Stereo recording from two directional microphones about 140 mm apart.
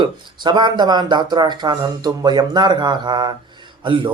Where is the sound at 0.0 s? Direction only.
30° right (ahead or behind).